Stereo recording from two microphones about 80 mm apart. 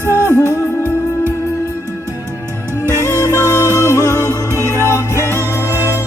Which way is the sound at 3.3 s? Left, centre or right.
Left.